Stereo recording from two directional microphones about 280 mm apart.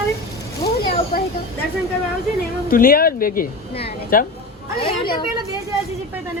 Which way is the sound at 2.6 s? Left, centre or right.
Left.